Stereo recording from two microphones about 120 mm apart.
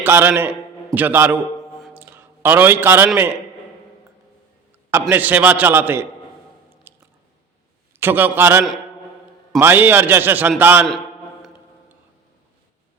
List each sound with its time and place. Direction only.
0.0 s a man's voice: 20° right (ahead or behind)
1.9 s a sound: 15° right (ahead or behind)
4.9 s a man's voice: 20° right (ahead or behind)
6.9 s squish: 15° right (ahead or behind)
7.9 s a man's voice: 15° right (ahead or behind)